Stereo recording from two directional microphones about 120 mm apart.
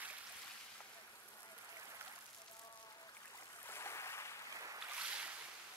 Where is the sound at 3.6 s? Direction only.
20° left (ahead or behind).